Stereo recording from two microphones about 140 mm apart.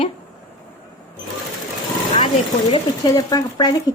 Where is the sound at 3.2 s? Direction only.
30° left (ahead or behind).